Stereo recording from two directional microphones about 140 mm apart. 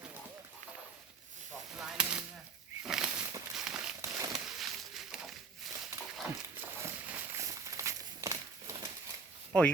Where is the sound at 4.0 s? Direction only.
25° right (ahead or behind).